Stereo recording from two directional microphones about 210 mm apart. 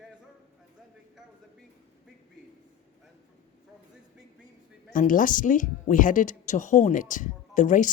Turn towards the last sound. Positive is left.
turn(degrees=35)  # may be behind; listen again after turning